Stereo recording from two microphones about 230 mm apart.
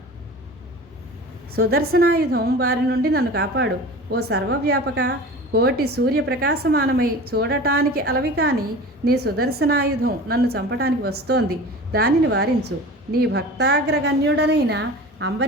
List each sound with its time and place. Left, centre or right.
1.5 s a woman's voice: right